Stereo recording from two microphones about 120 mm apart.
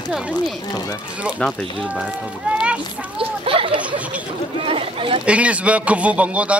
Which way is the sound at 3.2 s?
50° right (ahead or behind).